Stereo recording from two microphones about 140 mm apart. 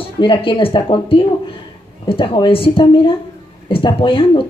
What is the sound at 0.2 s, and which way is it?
Speech, 35° left (ahead or behind).